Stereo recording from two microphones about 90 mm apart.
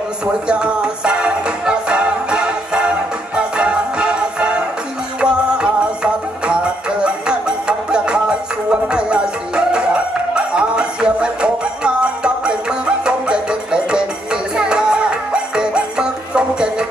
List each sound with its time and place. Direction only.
0.2 s music: 10° right (ahead or behind)